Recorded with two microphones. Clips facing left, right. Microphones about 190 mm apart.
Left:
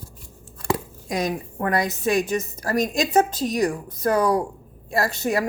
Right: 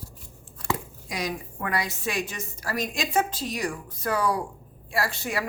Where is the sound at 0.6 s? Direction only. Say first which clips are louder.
Left 6 dB; 50° left (ahead or behind).